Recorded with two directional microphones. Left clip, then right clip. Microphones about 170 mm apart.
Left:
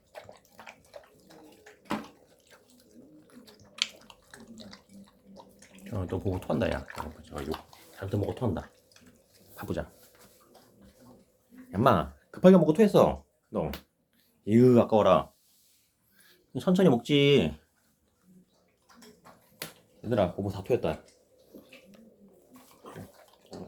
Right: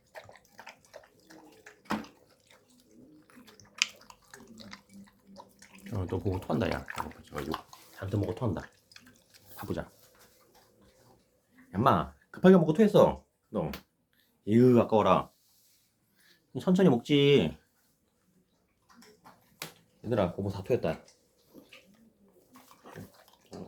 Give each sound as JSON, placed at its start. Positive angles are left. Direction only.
{"t": 3.8, "sound": "bathtub", "side_deg": -20}
{"t": 7.9, "sound": "speech", "side_deg": 0}
{"t": 11.7, "sound": "speech", "side_deg": 15}
{"t": 16.2, "sound": "speech", "side_deg": 5}
{"t": 20.0, "sound": "speech", "side_deg": 0}